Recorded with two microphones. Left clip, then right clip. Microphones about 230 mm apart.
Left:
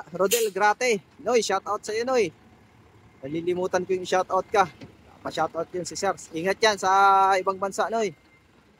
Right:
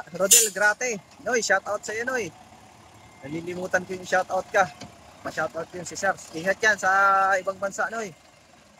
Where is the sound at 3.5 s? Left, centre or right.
Centre.